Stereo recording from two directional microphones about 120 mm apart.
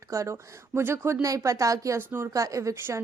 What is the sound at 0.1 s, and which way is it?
A woman's voice, 25° right (ahead or behind).